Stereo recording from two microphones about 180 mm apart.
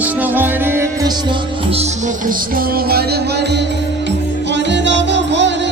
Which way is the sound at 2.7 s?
60° right (ahead or behind).